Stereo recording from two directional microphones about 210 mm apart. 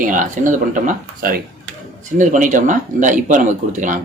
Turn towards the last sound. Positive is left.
turn(degrees=-35)  # may be behind; listen again after turning